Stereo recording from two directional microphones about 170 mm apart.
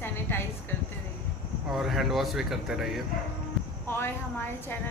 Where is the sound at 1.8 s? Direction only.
Centre (ahead or behind).